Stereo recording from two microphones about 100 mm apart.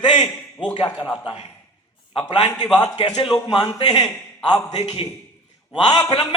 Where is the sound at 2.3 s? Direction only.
50° left (ahead or behind).